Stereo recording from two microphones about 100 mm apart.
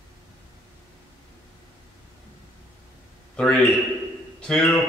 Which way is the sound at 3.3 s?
5° left (ahead or behind).